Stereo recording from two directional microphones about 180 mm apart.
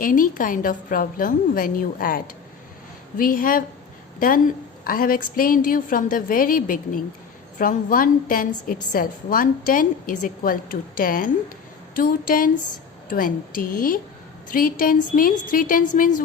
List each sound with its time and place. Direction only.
0.0 s a woman's voice: 50° left (ahead or behind)